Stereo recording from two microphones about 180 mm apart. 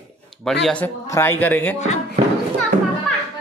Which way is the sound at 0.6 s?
5° left (ahead or behind).